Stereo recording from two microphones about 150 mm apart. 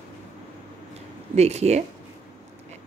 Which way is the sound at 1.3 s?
45° right (ahead or behind).